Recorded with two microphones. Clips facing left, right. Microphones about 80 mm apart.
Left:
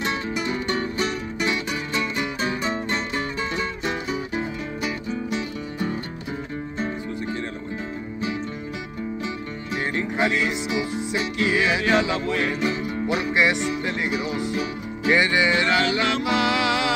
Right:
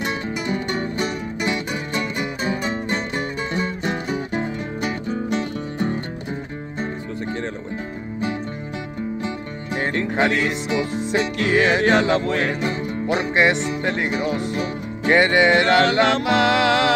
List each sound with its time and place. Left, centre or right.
3.8 s music: right
9.9 s music: right